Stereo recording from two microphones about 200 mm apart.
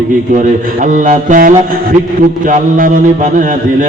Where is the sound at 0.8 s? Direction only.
40° right (ahead or behind).